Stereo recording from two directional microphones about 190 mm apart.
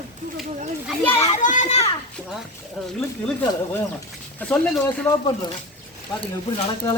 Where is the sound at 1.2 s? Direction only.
40° left (ahead or behind).